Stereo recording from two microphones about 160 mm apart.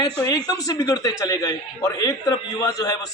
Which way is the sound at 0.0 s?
25° left (ahead or behind).